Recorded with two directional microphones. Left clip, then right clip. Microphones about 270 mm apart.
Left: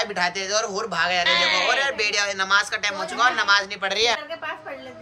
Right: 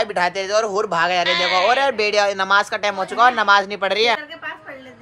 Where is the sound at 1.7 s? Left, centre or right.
Centre.